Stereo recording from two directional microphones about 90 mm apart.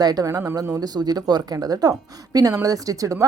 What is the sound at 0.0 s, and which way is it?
Speech, 45° right (ahead or behind).